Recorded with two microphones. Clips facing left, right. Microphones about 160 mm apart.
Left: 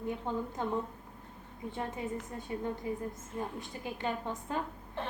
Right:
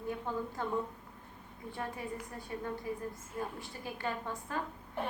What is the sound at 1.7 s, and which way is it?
Speech, 20° left (ahead or behind).